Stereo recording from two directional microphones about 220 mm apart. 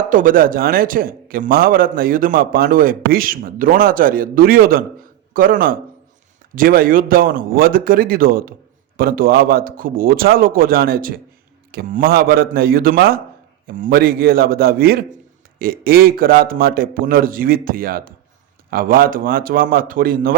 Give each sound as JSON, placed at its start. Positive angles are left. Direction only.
{"t": 0.1, "sound": "a man's voice", "side_deg": -40}